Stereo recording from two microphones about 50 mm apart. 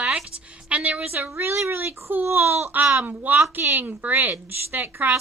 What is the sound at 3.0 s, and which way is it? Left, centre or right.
A woman's voice, right.